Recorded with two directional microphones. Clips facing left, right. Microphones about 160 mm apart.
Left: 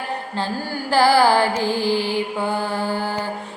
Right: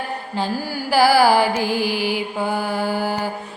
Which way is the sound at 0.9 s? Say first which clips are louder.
Right 1 dB; 10° right (ahead or behind).